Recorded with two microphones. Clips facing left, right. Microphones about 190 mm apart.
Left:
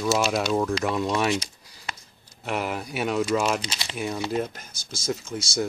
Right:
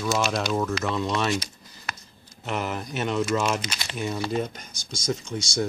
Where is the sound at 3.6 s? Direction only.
25° left (ahead or behind).